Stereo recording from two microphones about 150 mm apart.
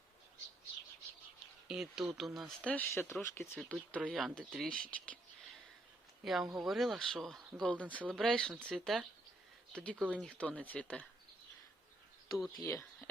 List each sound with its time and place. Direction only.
1.6 s speech: 5° right (ahead or behind)
2.7 s speech: 15° left (ahead or behind)
4.0 s speech: centre (ahead or behind)
6.2 s speech: centre (ahead or behind)
12.6 s speech: 15° left (ahead or behind)